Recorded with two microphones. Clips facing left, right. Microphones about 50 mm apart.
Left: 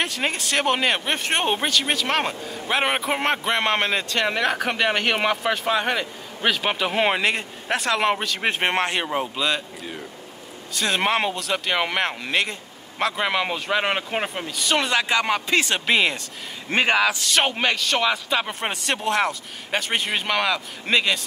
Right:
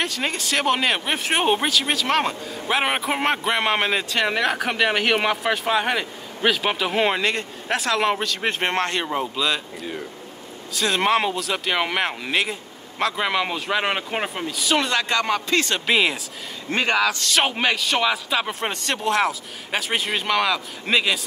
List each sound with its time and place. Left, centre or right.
0.0 s speech: centre
16.7 s speech: centre
17.2 s speech: centre